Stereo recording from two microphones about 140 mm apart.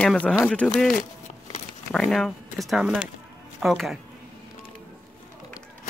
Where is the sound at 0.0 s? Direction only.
5° left (ahead or behind).